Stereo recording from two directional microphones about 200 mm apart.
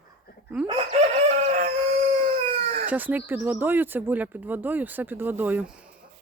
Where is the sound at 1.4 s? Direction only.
35° right (ahead or behind).